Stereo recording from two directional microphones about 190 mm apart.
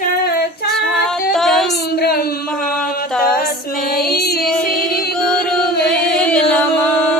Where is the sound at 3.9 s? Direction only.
55° left (ahead or behind).